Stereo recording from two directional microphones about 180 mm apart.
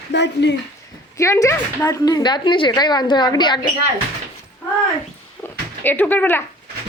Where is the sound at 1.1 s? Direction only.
15° left (ahead or behind).